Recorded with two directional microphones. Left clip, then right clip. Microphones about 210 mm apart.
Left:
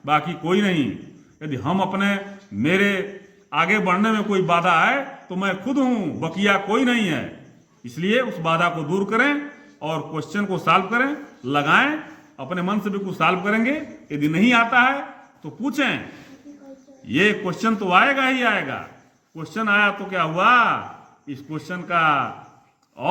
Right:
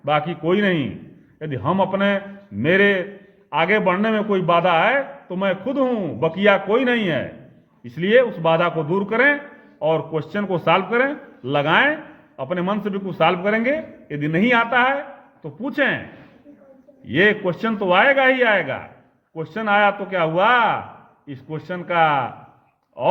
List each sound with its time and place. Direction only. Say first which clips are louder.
0.0 s a man's voice: right 1 dB; 30° right (ahead or behind)
17.1 s a man's voice: right 3 dB; 35° right (ahead or behind)